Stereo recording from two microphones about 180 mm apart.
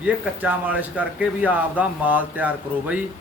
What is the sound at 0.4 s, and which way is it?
A man's voice, 10° right (ahead or behind).